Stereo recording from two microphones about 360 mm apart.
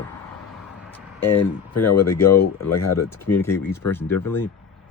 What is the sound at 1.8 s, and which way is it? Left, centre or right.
Speech, left.